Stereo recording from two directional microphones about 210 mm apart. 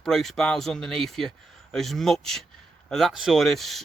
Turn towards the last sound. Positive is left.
turn(degrees=0)  # may be behind; listen again after turning